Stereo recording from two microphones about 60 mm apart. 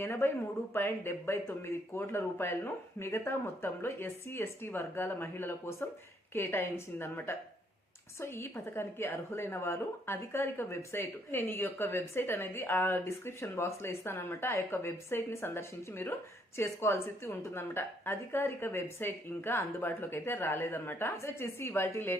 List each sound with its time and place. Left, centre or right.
0.0 s a woman's voice: left
8.2 s a woman's voice: left
16.6 s a woman's voice: left